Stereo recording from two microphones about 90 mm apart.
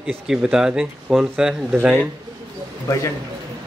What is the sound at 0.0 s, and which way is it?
Speech, 10° right (ahead or behind).